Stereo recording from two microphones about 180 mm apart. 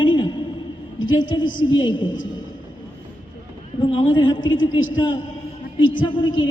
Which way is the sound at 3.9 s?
25° left (ahead or behind).